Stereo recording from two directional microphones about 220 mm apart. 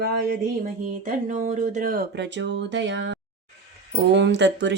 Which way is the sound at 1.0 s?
35° right (ahead or behind).